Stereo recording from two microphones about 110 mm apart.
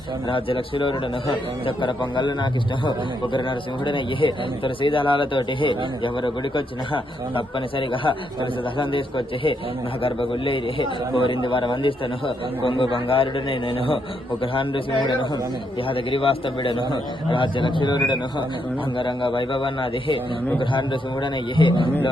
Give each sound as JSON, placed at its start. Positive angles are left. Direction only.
{"t": 0.3, "sound": "a man's voice", "side_deg": 55}